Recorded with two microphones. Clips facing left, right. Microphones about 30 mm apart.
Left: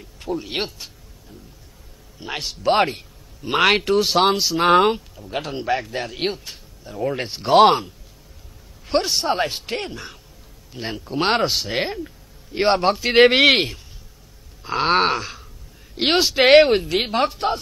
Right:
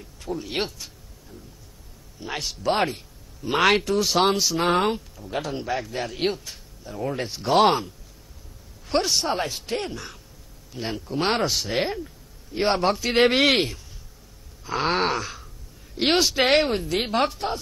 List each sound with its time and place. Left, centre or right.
0.2 s speech: left
2.2 s speech: centre
3.7 s speech: left
4.0 s a man's voice: left
7.2 s speech: left
7.5 s a man's voice: centre
9.5 s speech: left
9.8 s a man's voice: centre
11.7 s a man's voice: centre
13.0 s speech: left
14.8 s speech: left
16.4 s speech: left
17.0 s a man's voice: centre